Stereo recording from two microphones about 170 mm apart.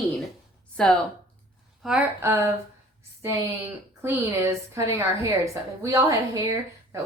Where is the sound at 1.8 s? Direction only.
5° right (ahead or behind).